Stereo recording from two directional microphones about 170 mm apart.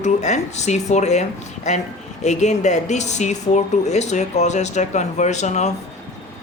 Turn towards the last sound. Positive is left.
turn(degrees=40)  # may be behind; listen again after turning